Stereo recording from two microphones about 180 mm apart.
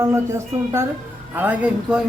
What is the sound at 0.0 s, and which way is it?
A woman's voice, 15° right (ahead or behind).